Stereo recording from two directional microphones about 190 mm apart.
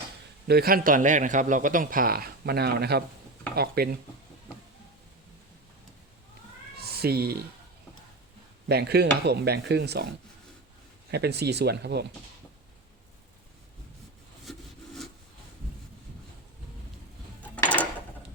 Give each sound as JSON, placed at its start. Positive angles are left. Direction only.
{"t": 0.4, "sound": "a man's voice", "side_deg": -55}
{"t": 6.7, "sound": "cat", "side_deg": -55}
{"t": 8.6, "sound": "speech", "side_deg": -60}
{"t": 11.1, "sound": "speech", "side_deg": -60}
{"t": 17.5, "sound": "a sound", "side_deg": 10}